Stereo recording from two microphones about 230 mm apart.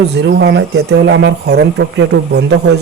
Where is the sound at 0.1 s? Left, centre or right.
Right.